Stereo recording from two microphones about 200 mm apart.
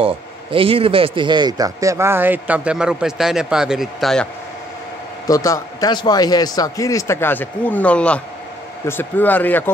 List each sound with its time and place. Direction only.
0.0 s speech: 25° right (ahead or behind); by 4.3 s centre (ahead or behind)
5.2 s a man's voice: 15° left (ahead or behind)